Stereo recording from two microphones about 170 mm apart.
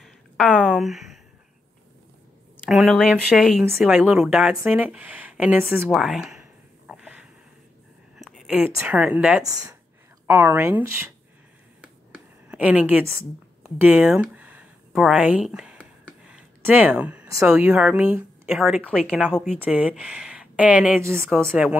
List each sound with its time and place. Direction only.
0.0 s a sound: 5° left (ahead or behind)
0.7 s speech: centre (ahead or behind)
2.6 s speech: centre (ahead or behind)
5.9 s speech: centre (ahead or behind)
6.9 s a sound: 5° right (ahead or behind)
8.2 s a woman's voice: centre (ahead or behind)
9.4 s speech: 20° right (ahead or behind)
11.8 s a sound: 5° right (ahead or behind)
13.7 s speech: 10° right (ahead or behind)
14.9 s a sound: centre (ahead or behind)
17.6 s speech: 10° right (ahead or behind)
19.5 s speech: 10° right (ahead or behind)